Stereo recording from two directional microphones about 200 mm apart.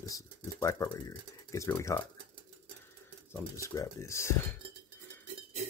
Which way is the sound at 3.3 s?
15° left (ahead or behind).